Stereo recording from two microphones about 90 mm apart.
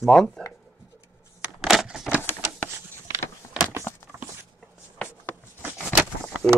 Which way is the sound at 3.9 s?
30° left (ahead or behind).